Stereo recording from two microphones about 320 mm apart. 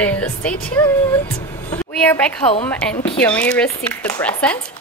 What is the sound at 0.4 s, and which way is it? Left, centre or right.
Speech, centre.